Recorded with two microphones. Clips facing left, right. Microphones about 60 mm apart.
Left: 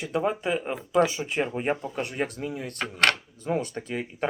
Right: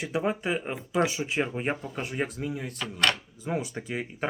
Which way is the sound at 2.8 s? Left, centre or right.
Left.